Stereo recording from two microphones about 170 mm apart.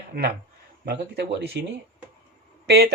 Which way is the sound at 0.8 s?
85° right.